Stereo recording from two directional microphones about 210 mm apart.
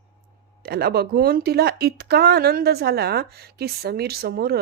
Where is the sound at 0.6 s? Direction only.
50° right (ahead or behind).